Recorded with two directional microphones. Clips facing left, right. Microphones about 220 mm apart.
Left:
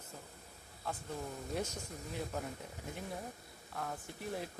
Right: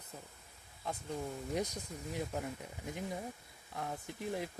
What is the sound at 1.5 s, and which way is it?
Speech, 15° right (ahead or behind).